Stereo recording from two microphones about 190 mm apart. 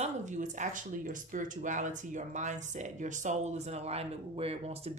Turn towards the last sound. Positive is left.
turn(degrees=-30)  # may be behind; listen again after turning